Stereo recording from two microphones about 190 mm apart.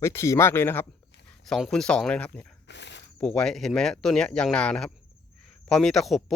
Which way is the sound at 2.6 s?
65° left (ahead or behind).